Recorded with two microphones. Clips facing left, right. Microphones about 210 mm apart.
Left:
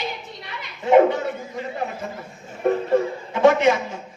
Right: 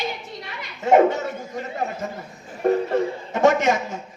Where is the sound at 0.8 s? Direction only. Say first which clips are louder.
Left 1 dB; 45° right (ahead or behind).